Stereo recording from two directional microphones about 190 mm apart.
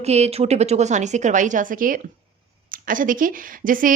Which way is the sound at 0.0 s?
35° right (ahead or behind).